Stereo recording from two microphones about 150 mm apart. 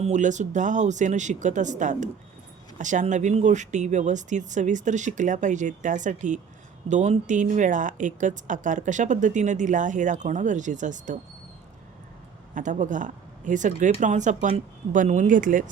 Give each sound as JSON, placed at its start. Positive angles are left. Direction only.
{"t": 0.0, "sound": "speech", "side_deg": -55}
{"t": 12.5, "sound": "speech", "side_deg": -60}